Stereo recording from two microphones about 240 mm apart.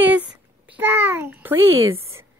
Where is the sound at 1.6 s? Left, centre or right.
Right.